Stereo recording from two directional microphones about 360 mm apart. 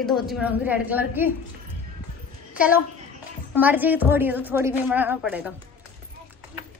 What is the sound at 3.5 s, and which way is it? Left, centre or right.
A woman's voice, centre.